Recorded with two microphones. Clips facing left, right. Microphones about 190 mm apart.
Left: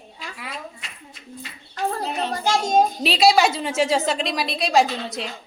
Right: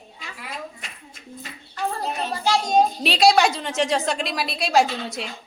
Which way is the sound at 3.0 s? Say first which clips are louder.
Even; centre (ahead or behind).